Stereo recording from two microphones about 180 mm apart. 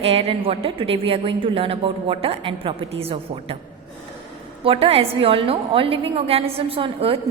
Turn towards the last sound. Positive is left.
turn(degrees=-30)  # may be behind; listen again after turning